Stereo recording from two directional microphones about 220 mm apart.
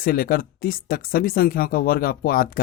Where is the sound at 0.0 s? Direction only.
40° left (ahead or behind).